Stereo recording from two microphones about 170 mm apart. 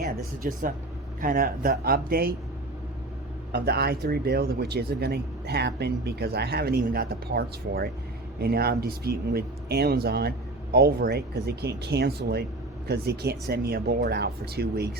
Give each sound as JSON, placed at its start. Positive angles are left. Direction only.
{"t": 0.4, "sound": "speech", "side_deg": -50}
{"t": 3.5, "sound": "speech", "side_deg": -70}